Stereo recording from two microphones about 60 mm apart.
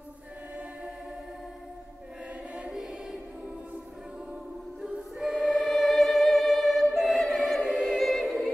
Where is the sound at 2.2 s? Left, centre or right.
Right.